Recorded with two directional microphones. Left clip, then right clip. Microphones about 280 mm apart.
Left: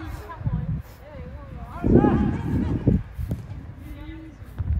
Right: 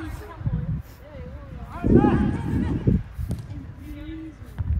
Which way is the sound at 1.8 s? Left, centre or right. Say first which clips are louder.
Even; right.